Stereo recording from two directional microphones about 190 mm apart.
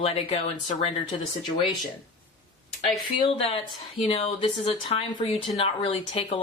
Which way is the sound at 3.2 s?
30° left (ahead or behind).